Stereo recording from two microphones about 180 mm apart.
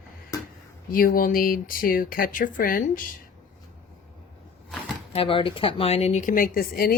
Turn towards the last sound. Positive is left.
turn(degrees=55)  # may be behind; listen again after turning